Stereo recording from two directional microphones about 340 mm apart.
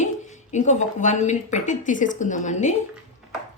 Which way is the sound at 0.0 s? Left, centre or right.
Left.